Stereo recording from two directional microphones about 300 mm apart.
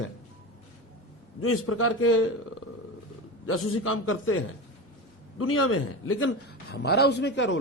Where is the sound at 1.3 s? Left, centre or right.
Left.